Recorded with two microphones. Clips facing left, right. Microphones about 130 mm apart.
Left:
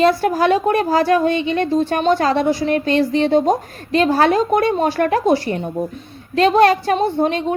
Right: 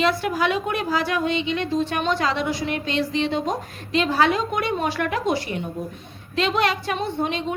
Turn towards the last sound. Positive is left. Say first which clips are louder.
# left 8 dB
turn(degrees=40)  # may be behind; listen again after turning